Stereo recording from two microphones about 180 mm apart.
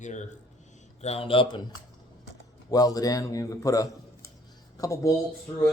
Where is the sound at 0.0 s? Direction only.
40° left (ahead or behind).